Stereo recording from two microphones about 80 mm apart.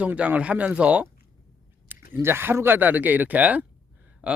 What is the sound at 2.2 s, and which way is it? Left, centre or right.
Speech, right.